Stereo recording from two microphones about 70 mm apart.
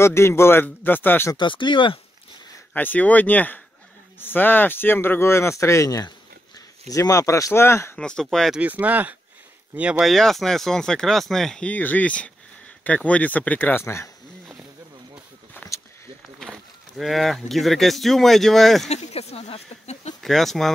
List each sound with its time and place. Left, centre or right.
0.0 s speech: left
2.7 s speech: left
7.9 s speech: centre
8.5 s speech: right
10.0 s speech: centre
11.6 s speech: left
13.8 s speech: left
16.3 s speech: centre
20.2 s speech: centre